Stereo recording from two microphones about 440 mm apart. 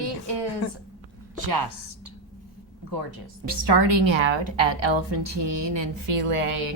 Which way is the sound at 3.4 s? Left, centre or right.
Right.